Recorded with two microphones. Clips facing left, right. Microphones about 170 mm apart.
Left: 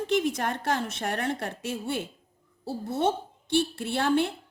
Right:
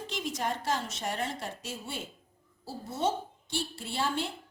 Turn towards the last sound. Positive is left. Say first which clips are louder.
# left 8 dB
turn(degrees=60)  # may be behind; listen again after turning